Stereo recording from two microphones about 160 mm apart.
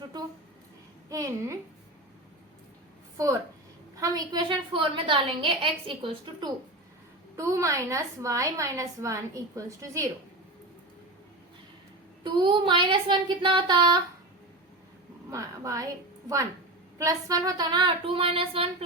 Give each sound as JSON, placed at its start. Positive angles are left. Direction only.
{"t": 1.1, "sound": "a woman's voice", "side_deg": -20}
{"t": 4.0, "sound": "a woman's voice", "side_deg": -25}
{"t": 7.3, "sound": "a woman's voice", "side_deg": -20}
{"t": 12.2, "sound": "a woman's voice", "side_deg": -30}
{"t": 15.3, "sound": "a woman's voice", "side_deg": -20}
{"t": 17.0, "sound": "a woman's voice", "side_deg": -20}